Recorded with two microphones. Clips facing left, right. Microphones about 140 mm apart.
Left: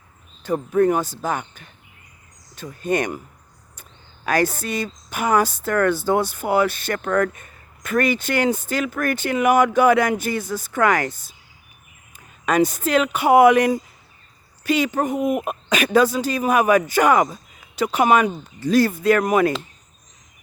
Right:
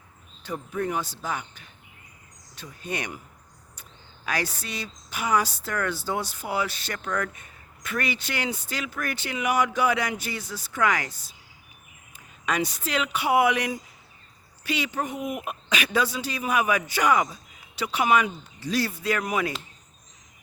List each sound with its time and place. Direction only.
0.4 s a woman's voice: 50° left (ahead or behind)